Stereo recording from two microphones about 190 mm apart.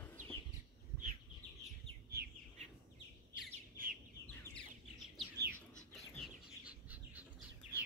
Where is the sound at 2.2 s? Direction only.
55° right (ahead or behind).